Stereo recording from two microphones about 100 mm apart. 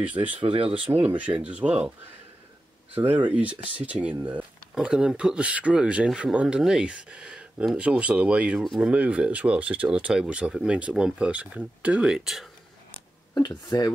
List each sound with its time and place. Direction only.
0.4 s speech: 60° right (ahead or behind)
0.9 s speech: 15° right (ahead or behind)
2.9 s speech: 15° right (ahead or behind)
13.7 s speech: 40° left (ahead or behind)